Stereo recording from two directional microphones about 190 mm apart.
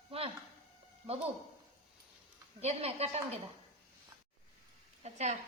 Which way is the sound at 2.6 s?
35° right (ahead or behind).